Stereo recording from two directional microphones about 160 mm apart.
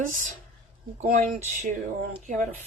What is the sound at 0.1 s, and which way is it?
A woman's voice, 55° right (ahead or behind).